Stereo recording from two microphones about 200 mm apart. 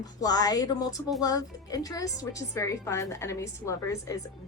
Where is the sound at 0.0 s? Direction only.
20° left (ahead or behind).